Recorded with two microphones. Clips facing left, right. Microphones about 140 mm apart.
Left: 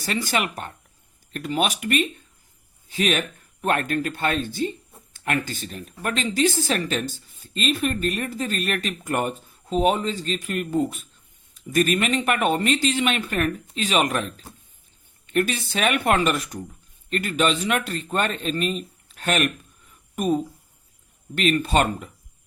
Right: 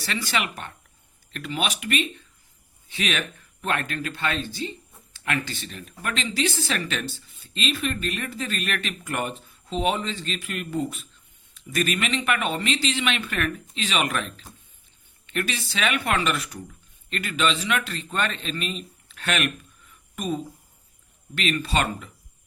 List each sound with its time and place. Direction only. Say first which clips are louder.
0.0 s speech: left 3 dB; 45° left (ahead or behind)